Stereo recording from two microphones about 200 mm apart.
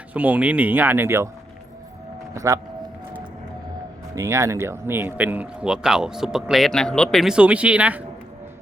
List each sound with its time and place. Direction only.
0.1 s speech: 10° right (ahead or behind)
2.3 s speech: 15° right (ahead or behind)
4.1 s speech: 15° right (ahead or behind)